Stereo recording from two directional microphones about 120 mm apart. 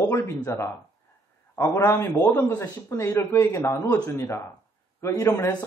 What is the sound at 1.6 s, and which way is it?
Speech, 25° left (ahead or behind).